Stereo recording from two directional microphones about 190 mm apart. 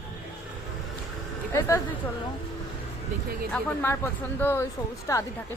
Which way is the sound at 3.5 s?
10° left (ahead or behind).